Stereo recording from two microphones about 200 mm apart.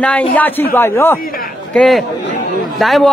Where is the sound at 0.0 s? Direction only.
10° left (ahead or behind).